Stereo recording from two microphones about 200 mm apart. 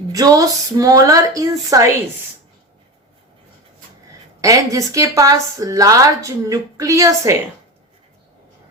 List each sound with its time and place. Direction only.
0.1 s a woman's voice: 15° right (ahead or behind)
4.4 s a woman's voice: 15° right (ahead or behind)